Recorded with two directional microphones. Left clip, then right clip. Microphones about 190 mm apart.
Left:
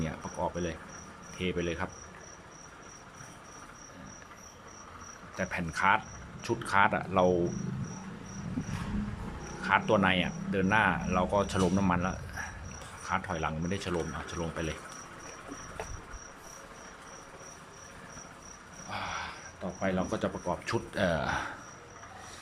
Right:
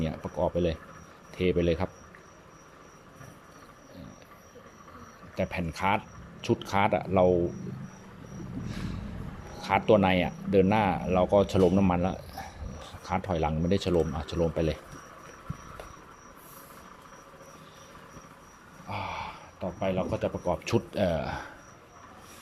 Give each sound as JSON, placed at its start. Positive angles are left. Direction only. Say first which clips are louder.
{"t": 0.0, "sound": "speech", "louder": "right 5 dB", "side_deg": -15}
{"t": 5.4, "sound": "speech", "louder": "even", "side_deg": -15}
{"t": 9.6, "sound": "speech", "louder": "right 3 dB", "side_deg": -20}
{"t": 18.9, "sound": "a sound", "louder": "right 2 dB", "side_deg": -15}
{"t": 19.8, "sound": "speech", "louder": "right 2 dB", "side_deg": -10}